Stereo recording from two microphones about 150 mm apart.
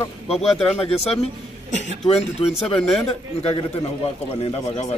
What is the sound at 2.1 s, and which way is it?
Speech, 45° left (ahead or behind).